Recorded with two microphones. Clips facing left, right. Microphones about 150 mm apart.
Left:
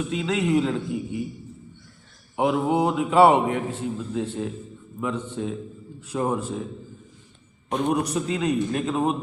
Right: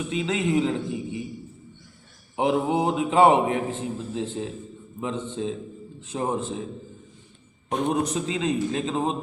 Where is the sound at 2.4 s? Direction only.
25° right (ahead or behind).